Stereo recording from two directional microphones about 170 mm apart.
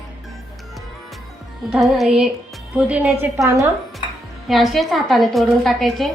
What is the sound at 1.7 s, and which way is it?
A woman's voice, centre (ahead or behind).